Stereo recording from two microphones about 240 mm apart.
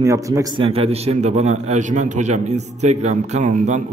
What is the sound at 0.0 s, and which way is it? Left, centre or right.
A man's voice, centre.